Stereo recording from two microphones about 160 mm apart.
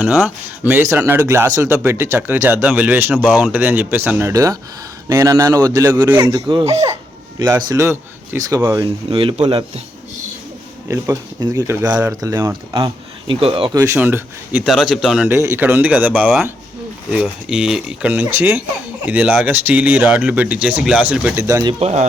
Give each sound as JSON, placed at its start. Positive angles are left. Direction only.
{"t": 0.6, "sound": "speech", "side_deg": -10}
{"t": 9.0, "sound": "speech", "side_deg": -35}
{"t": 10.8, "sound": "speech", "side_deg": -20}
{"t": 13.7, "sound": "speech", "side_deg": -15}
{"t": 15.3, "sound": "speech", "side_deg": -15}
{"t": 21.4, "sound": "speech", "side_deg": -25}
{"t": 21.8, "sound": "speech", "side_deg": -45}